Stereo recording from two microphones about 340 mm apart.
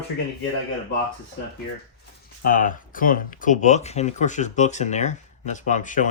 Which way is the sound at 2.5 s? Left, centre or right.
Left.